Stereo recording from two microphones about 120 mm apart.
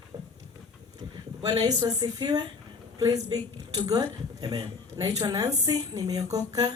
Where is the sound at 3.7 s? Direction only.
30° right (ahead or behind).